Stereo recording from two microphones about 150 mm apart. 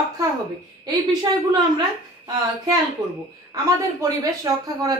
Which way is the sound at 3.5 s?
20° right (ahead or behind).